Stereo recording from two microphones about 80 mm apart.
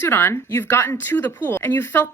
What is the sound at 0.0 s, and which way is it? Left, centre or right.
Speech, left.